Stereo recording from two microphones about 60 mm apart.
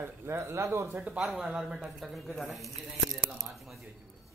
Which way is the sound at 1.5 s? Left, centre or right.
Centre.